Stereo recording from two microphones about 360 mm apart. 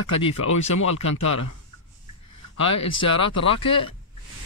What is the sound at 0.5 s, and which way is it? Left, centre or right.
Speech, left.